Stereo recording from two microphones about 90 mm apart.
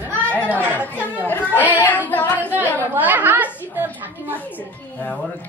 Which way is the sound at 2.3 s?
20° right (ahead or behind).